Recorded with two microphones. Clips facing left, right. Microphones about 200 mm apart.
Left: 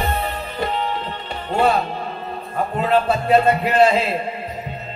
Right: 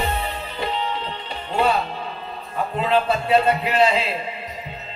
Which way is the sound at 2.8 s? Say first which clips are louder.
Left 2 dB; 50° left (ahead or behind).